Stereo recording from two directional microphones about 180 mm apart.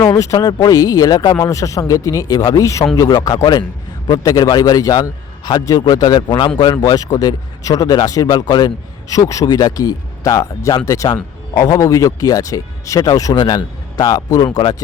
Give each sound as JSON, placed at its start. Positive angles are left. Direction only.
{"t": 0.0, "sound": "speech", "side_deg": 20}